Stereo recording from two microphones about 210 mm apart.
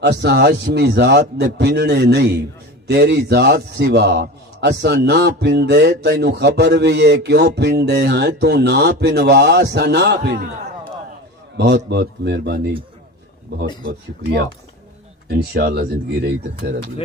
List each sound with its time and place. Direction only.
0.0 s a man's voice: 55° right (ahead or behind)
13.8 s a man's voice: 50° right (ahead or behind)